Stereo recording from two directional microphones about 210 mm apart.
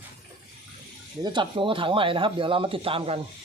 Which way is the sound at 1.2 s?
20° right (ahead or behind).